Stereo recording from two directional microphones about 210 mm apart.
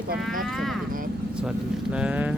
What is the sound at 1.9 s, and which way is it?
Speech, 5° right (ahead or behind).